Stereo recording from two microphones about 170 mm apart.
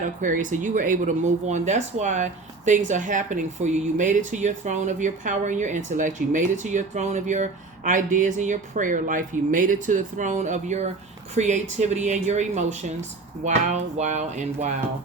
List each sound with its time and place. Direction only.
0.0 s speech: 50° right (ahead or behind)